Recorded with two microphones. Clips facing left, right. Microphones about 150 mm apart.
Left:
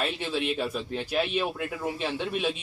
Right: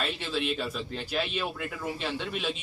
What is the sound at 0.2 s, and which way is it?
A man's voice, 15° left (ahead or behind).